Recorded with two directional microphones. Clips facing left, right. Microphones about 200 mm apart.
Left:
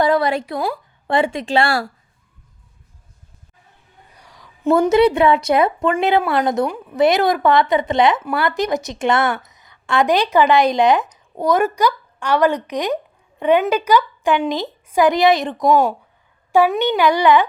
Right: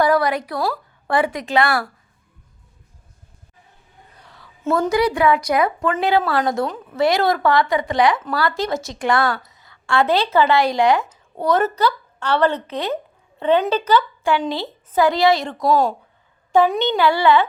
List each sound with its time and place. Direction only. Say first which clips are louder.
0.0 s a woman's voice: left 1 dB; 25° left (ahead or behind)
4.2 s a sound: left 5 dB; 15° left (ahead or behind)
4.8 s a woman's voice: left 4 dB; 25° left (ahead or behind)